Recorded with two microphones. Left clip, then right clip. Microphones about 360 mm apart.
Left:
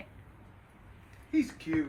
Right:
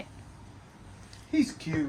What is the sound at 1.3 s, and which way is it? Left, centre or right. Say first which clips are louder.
Speech: right 3 dB; right.